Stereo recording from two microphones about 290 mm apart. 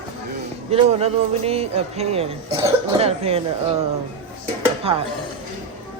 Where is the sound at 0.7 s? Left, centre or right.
Right.